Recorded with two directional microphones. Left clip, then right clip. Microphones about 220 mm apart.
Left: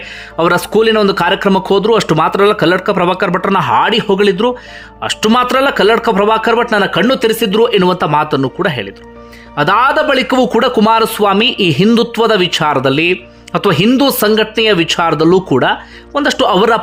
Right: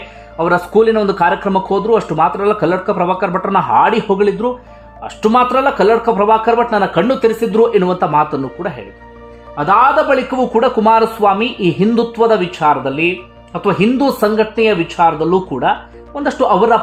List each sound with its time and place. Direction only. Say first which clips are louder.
0.3 s speech: left 1 dB; 15° left (ahead or behind)
16.1 s speech: left 2 dB; 15° left (ahead or behind)